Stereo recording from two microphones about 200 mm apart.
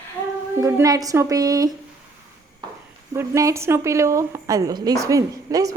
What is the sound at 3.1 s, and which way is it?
A woman's voice, 15° right (ahead or behind).